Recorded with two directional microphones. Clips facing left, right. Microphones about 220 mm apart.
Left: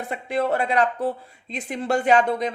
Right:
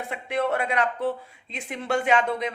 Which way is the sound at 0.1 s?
35° left (ahead or behind).